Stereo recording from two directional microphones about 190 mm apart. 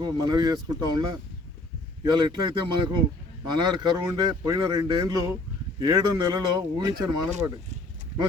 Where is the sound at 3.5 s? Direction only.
25° right (ahead or behind).